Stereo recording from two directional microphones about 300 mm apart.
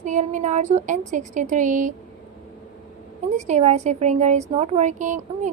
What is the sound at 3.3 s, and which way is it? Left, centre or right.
A woman's voice, right.